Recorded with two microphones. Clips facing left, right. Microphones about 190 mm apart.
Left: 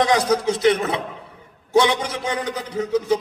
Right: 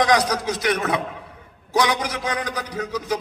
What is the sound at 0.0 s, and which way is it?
A man's voice, 25° left (ahead or behind).